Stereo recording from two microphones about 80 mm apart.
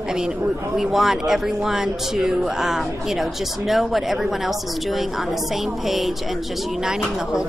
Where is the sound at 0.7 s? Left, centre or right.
Centre.